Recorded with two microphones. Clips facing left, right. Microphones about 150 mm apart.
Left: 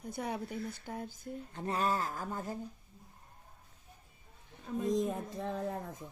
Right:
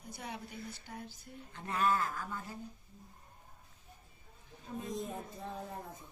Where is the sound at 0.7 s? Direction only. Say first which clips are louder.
Left 5 dB; 50° left (ahead or behind).